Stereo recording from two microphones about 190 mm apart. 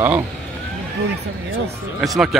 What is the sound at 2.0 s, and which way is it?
Speech, centre (ahead or behind).